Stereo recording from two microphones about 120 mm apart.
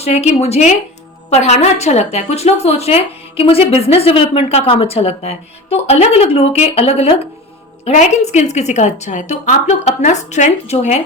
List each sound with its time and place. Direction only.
0.0 s a woman's voice: 60° left (ahead or behind)
7.9 s a woman's voice: 70° left (ahead or behind)